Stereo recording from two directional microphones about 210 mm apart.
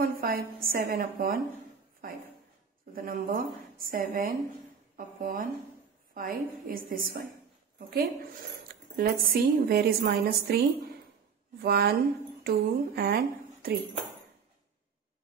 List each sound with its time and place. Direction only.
0.0 s a woman's voice: 45° right (ahead or behind)
2.9 s a woman's voice: 45° right (ahead or behind)
8.9 s a woman's voice: 45° right (ahead or behind)
11.6 s a woman's voice: 50° right (ahead or behind)